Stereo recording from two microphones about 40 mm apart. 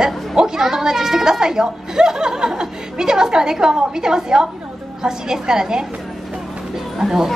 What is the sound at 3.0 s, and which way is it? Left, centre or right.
A woman's voice, centre.